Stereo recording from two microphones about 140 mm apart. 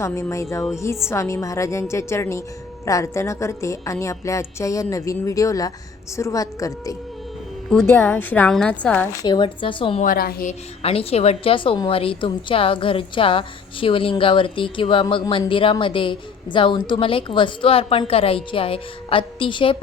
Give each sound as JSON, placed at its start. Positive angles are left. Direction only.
{"t": 0.0, "sound": "a woman's voice", "side_deg": 20}
{"t": 9.2, "sound": "a woman's voice", "side_deg": 35}
{"t": 10.0, "sound": "a woman's voice", "side_deg": 90}
{"t": 10.8, "sound": "a woman's voice", "side_deg": 45}